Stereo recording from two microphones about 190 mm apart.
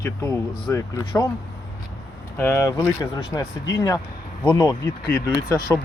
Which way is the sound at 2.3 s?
10° left (ahead or behind).